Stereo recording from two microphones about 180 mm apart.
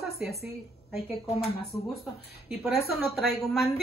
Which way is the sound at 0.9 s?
35° left (ahead or behind).